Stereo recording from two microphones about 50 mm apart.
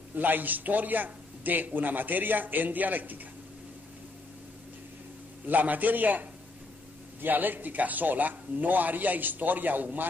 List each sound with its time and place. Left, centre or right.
0.1 s a man's voice: right
5.5 s a man's voice: right